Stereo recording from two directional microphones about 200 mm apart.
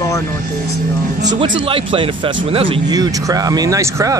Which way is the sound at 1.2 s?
20° right (ahead or behind).